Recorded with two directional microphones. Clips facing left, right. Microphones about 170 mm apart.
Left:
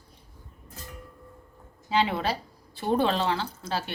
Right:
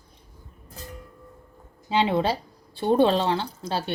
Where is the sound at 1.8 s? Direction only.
25° right (ahead or behind).